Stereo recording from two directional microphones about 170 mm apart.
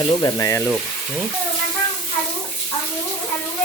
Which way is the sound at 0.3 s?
20° left (ahead or behind).